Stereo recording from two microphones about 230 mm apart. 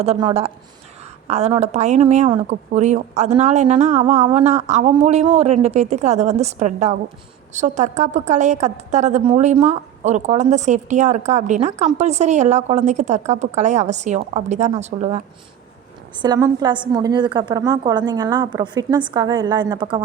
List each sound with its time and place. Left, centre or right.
0.0 s a woman's voice: right
16.1 s a woman's voice: centre